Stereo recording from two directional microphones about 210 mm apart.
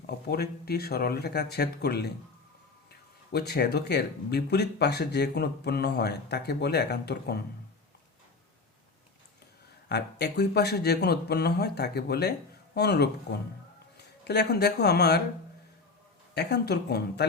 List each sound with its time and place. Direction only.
0.3 s speech: 50° left (ahead or behind)
3.3 s speech: 50° left (ahead or behind)
9.9 s speech: 55° left (ahead or behind)
16.3 s speech: 55° left (ahead or behind)